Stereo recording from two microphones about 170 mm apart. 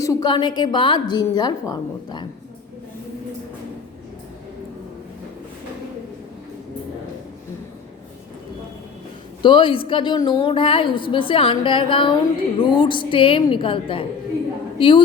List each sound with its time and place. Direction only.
0.0 s a woman's voice: 20° left (ahead or behind)
9.4 s a woman's voice: 30° left (ahead or behind)